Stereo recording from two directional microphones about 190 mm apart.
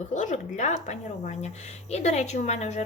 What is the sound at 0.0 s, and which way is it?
A woman's voice, 40° left (ahead or behind).